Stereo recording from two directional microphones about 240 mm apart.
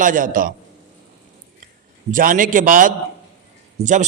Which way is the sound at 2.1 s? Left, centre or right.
Right.